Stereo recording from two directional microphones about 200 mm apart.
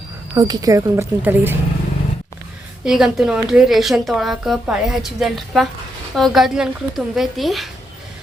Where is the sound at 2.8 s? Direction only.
Centre (ahead or behind).